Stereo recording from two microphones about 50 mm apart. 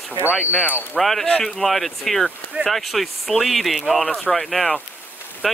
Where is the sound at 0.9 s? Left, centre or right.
Centre.